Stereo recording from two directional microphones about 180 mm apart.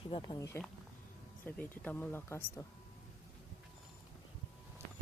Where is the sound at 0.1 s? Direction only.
25° left (ahead or behind).